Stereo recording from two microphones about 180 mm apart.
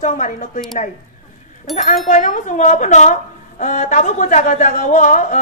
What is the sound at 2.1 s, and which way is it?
A woman's voice, 45° left (ahead or behind).